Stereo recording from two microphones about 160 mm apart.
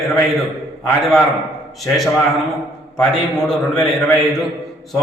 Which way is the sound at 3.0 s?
5° left (ahead or behind).